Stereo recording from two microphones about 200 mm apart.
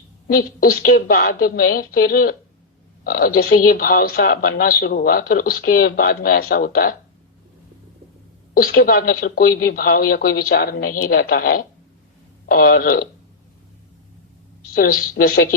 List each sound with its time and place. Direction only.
0.3 s a woman's voice: 45° left (ahead or behind)
8.5 s a woman's voice: 50° left (ahead or behind)
14.8 s a woman's voice: 45° left (ahead or behind)